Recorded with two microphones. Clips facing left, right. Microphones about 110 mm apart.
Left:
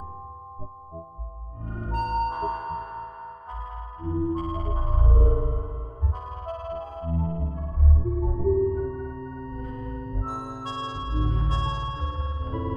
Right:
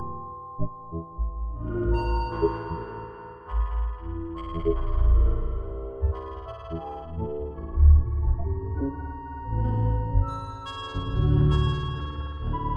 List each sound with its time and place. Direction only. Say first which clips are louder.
1.9 s music: left 6 dB; 20° left (ahead or behind)
2.4 s music: right 3 dB; 5° left (ahead or behind)
4.0 s music: left 9 dB; 25° left (ahead or behind); by 7.5 s 50° left (ahead or behind)
8.0 s music: left 10 dB; centre (ahead or behind)
9.5 s music: right 4 dB; 30° right (ahead or behind)
10.2 s music: left 2 dB; 35° left (ahead or behind)